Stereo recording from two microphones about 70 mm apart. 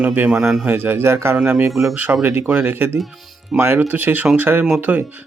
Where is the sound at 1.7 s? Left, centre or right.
Centre.